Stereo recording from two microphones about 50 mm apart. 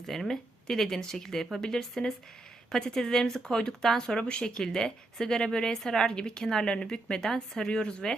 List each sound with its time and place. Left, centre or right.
0.0 s a woman's voice: centre